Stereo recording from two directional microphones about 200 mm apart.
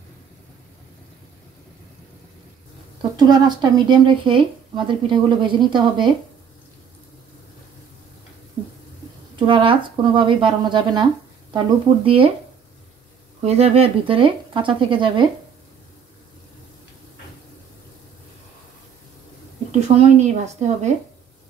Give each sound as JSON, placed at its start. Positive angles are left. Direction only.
{"t": 3.0, "sound": "speech", "side_deg": -20}
{"t": 9.5, "sound": "speech", "side_deg": -25}
{"t": 13.4, "sound": "speech", "side_deg": -30}
{"t": 20.0, "sound": "speech", "side_deg": -35}